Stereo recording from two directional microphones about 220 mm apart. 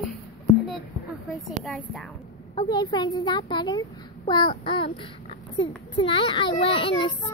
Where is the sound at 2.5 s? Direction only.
20° left (ahead or behind).